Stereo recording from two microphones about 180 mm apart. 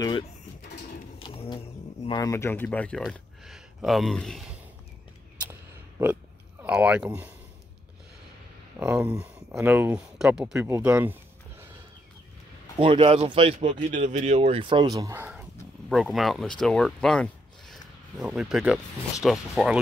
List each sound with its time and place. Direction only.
1.2 s a sound: 30° left (ahead or behind)
2.0 s speech: 20° left (ahead or behind); by 4.6 s centre (ahead or behind)
5.5 s a sound: 15° right (ahead or behind)
6.6 s speech: 10° right (ahead or behind)
8.7 s speech: 10° right (ahead or behind)
12.7 s speech: 30° right (ahead or behind)
15.9 s speech: centre (ahead or behind)